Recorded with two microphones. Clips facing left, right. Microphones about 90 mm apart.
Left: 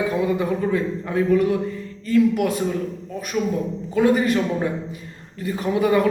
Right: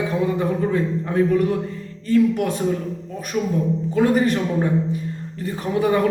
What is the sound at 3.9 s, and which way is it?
A man's voice, 40° right (ahead or behind).